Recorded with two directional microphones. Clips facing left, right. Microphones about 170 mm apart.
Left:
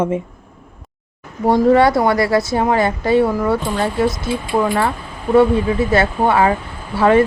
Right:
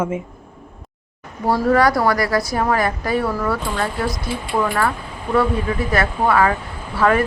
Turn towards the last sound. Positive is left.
turn(degrees=25)  # may be behind; listen again after turning